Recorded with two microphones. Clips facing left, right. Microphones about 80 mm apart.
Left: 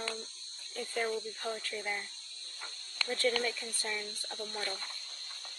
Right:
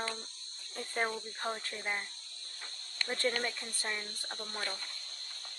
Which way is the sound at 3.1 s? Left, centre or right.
Right.